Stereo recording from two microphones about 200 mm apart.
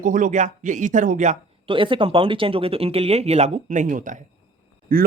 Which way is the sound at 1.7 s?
25° right (ahead or behind).